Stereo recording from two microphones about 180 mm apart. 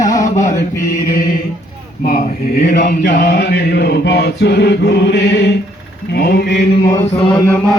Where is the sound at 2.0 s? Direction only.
60° left (ahead or behind); by 5.5 s 75° left (ahead or behind).